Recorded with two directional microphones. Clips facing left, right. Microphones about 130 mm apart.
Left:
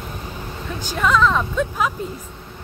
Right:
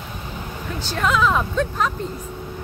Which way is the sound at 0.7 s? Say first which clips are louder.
Even; 15° left (ahead or behind).